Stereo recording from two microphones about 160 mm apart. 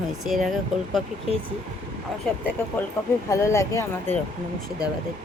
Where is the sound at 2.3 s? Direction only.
5° left (ahead or behind).